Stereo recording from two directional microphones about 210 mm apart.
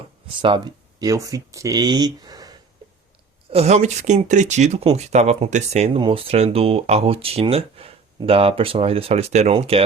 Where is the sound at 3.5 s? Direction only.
30° right (ahead or behind).